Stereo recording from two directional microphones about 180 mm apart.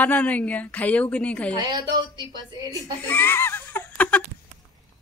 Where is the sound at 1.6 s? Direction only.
25° right (ahead or behind).